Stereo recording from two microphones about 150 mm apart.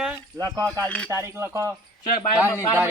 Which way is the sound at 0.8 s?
10° left (ahead or behind).